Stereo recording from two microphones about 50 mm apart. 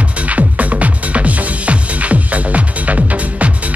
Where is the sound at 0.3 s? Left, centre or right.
Right.